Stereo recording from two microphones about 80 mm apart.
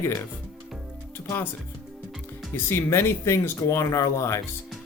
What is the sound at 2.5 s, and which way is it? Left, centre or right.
Speech, left.